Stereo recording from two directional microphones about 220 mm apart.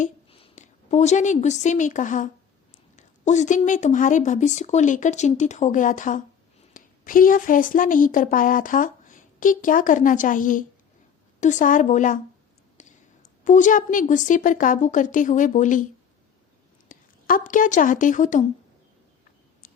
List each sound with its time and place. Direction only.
0.0 s a woman's voice: 25° left (ahead or behind)
12.8 s a sound: 30° left (ahead or behind)
13.4 s speech: 35° left (ahead or behind)
16.9 s a woman's voice: 40° left (ahead or behind)